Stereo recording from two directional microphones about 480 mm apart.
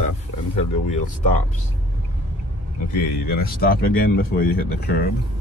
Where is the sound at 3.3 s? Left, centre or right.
Centre.